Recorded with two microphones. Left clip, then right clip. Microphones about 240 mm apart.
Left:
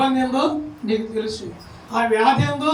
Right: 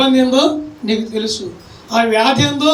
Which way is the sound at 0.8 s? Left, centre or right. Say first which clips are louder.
Right 5 dB; right.